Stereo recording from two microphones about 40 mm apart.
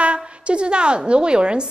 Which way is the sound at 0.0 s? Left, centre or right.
Right.